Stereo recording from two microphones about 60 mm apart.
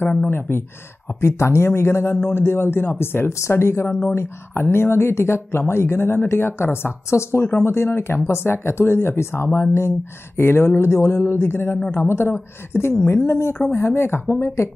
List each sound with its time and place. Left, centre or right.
0.3 s speech: left
1.2 s speech: left